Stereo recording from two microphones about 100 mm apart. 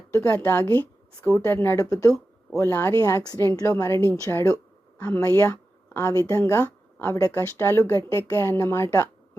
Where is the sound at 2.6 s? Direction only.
25° left (ahead or behind).